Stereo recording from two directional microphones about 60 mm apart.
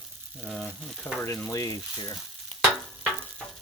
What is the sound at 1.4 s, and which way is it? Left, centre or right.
Speech, left.